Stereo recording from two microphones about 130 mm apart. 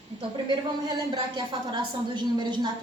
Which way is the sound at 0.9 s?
35° right (ahead or behind).